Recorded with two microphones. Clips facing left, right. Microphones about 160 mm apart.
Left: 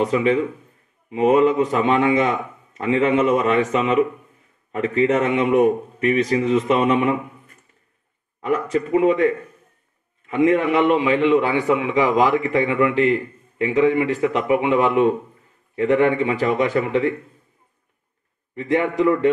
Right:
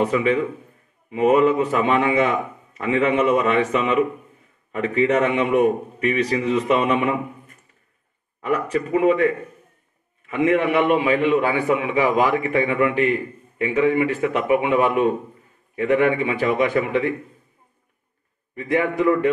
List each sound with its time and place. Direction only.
0.1 s a man's voice: 30° left (ahead or behind)
8.9 s a man's voice: 35° left (ahead or behind)
18.5 s a man's voice: 30° left (ahead or behind)